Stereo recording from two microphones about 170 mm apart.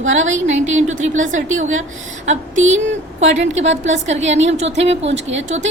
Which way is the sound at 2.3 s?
45° right (ahead or behind).